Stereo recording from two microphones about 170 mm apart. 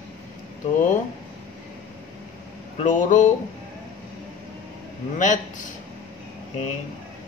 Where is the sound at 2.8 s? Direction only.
50° left (ahead or behind).